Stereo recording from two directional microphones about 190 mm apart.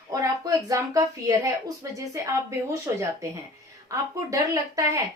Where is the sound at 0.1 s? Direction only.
20° right (ahead or behind).